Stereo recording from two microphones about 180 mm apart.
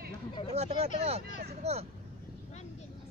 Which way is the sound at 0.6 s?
35° right (ahead or behind).